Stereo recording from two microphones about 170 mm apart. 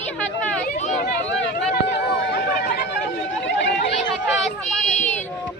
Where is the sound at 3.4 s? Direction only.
90° left.